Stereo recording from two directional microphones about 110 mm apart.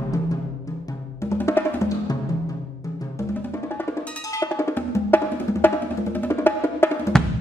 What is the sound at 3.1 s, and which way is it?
Music, 25° left (ahead or behind).